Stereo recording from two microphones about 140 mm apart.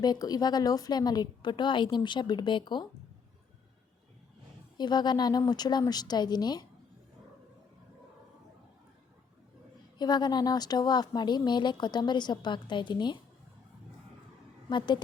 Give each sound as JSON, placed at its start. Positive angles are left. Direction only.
{"t": 0.0, "sound": "speech", "side_deg": 30}
{"t": 4.8, "sound": "a woman's voice", "side_deg": 30}
{"t": 10.0, "sound": "speech", "side_deg": 30}
{"t": 14.7, "sound": "speech", "side_deg": 35}